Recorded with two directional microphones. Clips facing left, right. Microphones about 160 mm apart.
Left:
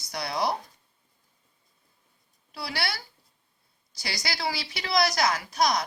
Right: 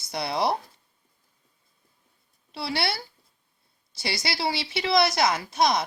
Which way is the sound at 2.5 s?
25° right (ahead or behind).